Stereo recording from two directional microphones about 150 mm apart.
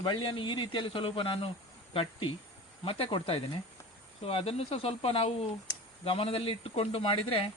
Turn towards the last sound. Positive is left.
turn(degrees=40)  # may be behind; listen again after turning